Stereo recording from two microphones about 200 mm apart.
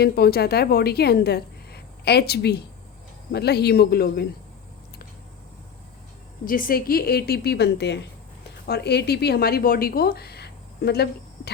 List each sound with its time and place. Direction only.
0.0 s a woman's voice: 50° left (ahead or behind)
6.4 s a woman's voice: 45° left (ahead or behind)